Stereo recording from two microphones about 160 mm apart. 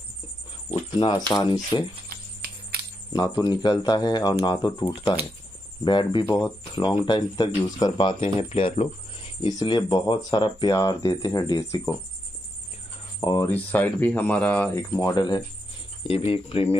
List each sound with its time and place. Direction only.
0.9 s speech: 30° left (ahead or behind)
2.0 s cricket: 70° right (ahead or behind)
3.1 s speech: 25° left (ahead or behind)
13.2 s speech: 25° left (ahead or behind)
13.5 s speech: 10° left (ahead or behind); by 16.7 s 35° left (ahead or behind)